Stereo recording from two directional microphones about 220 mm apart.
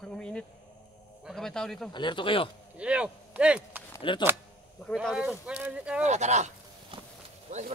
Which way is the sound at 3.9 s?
20° left (ahead or behind).